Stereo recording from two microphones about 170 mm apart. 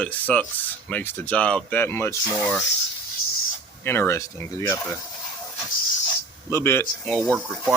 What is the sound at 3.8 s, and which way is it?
Speech, 15° left (ahead or behind).